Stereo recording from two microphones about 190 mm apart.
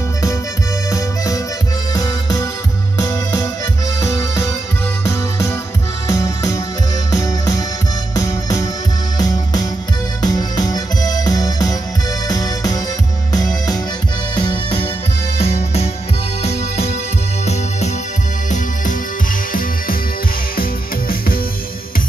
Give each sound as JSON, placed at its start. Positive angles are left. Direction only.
{"t": 0.8, "sound": "music", "side_deg": 20}
{"t": 6.0, "sound": "music", "side_deg": 15}